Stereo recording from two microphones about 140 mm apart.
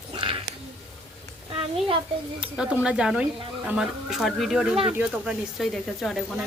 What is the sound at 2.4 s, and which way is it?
Speech, 10° right (ahead or behind).